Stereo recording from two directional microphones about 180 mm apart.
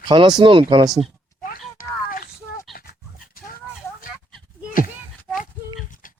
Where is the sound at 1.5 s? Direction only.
50° left (ahead or behind).